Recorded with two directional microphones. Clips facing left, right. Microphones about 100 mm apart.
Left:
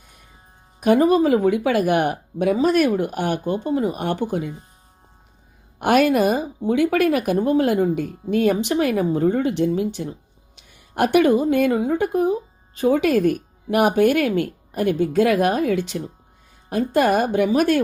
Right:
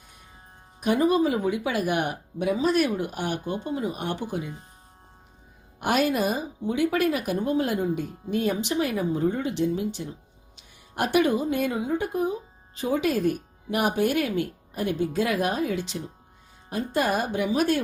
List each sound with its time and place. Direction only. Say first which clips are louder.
0.8 s speech: left 6 dB; 55° left (ahead or behind)
5.8 s a woman's voice: left 7 dB; 60° left (ahead or behind)